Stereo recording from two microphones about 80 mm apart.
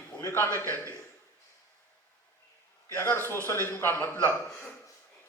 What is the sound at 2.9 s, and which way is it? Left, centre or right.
A man's voice, left.